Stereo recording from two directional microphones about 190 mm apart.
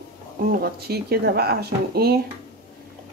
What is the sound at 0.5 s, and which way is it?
Speech, 55° right (ahead or behind).